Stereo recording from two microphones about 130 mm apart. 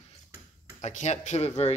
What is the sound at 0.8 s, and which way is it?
Speech, 65° left (ahead or behind).